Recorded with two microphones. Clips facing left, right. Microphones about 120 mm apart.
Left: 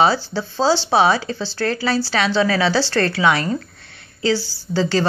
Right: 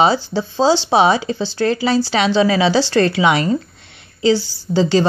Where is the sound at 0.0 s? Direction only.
20° right (ahead or behind).